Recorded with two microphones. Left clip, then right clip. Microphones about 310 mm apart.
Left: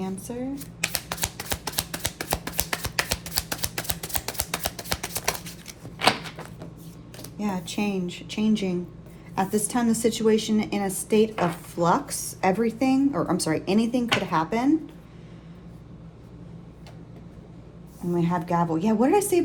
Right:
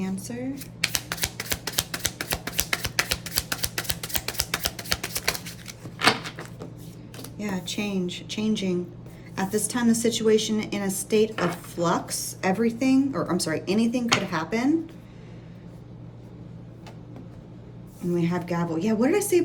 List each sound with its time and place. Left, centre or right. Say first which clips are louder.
0.0 s speech: left 1 dB; centre
1.1 s a sound: right 1 dB; centre
7.3 s a woman's voice: left 1 dB; centre
18.1 s a woman's voice: left 2 dB; centre